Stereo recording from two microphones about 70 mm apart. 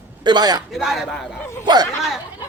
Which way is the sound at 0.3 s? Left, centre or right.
Right.